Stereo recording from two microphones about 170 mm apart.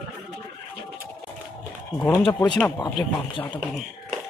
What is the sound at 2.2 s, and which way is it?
Speech, 30° left (ahead or behind).